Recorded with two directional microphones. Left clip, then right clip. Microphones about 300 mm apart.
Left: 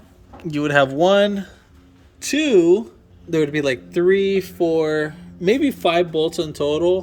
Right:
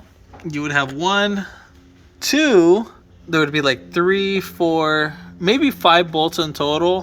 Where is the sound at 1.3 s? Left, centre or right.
Centre.